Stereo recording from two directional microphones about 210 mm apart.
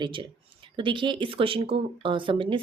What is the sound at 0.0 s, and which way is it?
Speech, 25° right (ahead or behind).